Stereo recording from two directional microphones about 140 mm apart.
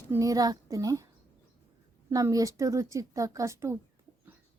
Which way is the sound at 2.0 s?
20° right (ahead or behind).